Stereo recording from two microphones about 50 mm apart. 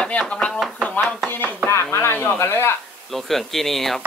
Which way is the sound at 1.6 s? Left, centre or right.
Left.